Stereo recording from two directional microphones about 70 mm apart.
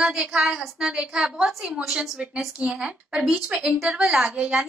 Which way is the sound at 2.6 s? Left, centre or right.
Centre.